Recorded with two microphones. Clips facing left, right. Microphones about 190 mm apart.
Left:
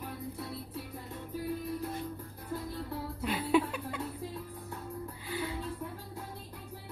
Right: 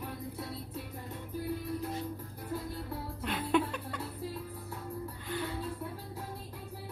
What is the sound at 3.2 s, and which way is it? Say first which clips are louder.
Music: left 2 dB; 5° left (ahead or behind).